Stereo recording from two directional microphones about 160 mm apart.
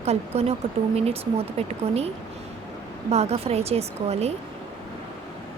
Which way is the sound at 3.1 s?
40° right (ahead or behind).